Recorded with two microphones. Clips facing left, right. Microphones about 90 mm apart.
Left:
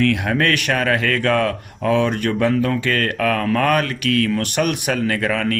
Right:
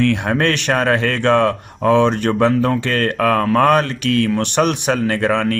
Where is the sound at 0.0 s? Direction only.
30° right (ahead or behind).